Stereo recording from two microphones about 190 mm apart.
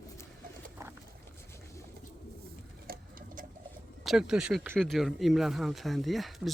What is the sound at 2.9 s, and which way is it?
Clock, 50° right (ahead or behind).